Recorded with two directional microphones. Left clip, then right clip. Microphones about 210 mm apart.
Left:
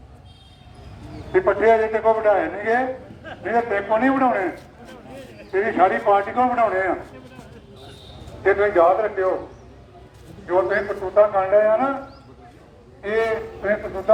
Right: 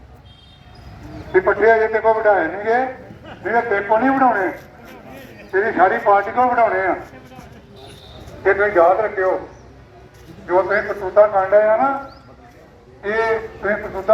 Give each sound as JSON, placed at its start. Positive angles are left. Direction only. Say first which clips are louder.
{"t": 1.3, "sound": "a man's voice", "louder": "right 3 dB", "side_deg": 15}
{"t": 5.5, "sound": "a man's voice", "louder": "right 3 dB", "side_deg": 10}
{"t": 8.4, "sound": "a man's voice", "louder": "right 2 dB", "side_deg": 0}
{"t": 10.4, "sound": "a man's voice", "louder": "right 3 dB", "side_deg": 10}
{"t": 13.1, "sound": "a man's voice", "louder": "right 3 dB", "side_deg": 20}